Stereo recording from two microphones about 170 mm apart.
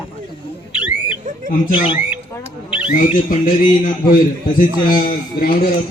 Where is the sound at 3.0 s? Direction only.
55° left (ahead or behind).